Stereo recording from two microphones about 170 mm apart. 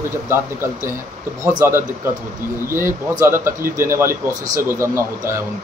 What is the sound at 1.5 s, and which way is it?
Speech, 15° right (ahead or behind).